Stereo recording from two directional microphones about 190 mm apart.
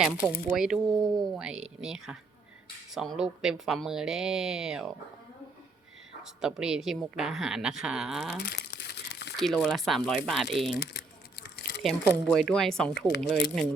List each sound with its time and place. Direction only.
0.5 s speech: 5° right (ahead or behind)
0.9 s speech: 20° right (ahead or behind)
1.3 s speech: 5° right (ahead or behind)
6.4 s speech: 5° right (ahead or behind)
8.5 s crumpling: 60° left (ahead or behind)
9.4 s speech: centre (ahead or behind)
10.8 s crumpling: 60° left (ahead or behind)
11.8 s speech: centre (ahead or behind)